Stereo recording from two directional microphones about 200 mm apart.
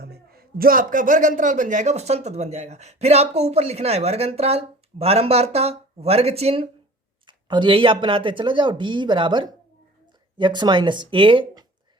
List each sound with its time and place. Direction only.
0.0 s a man's voice: 50° right (ahead or behind); by 11.6 s 25° right (ahead or behind)